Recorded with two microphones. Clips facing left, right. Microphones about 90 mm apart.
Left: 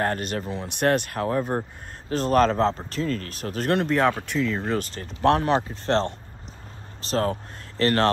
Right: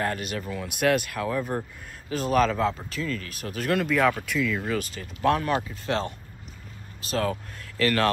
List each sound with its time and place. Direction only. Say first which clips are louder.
0.0 s speech: left 3 dB; 45° left (ahead or behind)
7.1 s speech: left 2 dB; 35° left (ahead or behind)